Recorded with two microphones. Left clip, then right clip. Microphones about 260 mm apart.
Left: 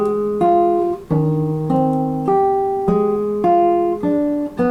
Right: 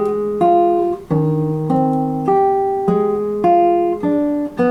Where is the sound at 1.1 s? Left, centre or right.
Right.